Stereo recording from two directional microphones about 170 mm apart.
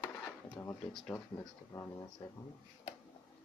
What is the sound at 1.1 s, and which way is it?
Speech, 15° left (ahead or behind).